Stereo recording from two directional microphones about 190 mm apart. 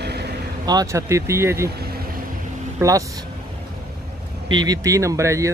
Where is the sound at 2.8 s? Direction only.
15° right (ahead or behind).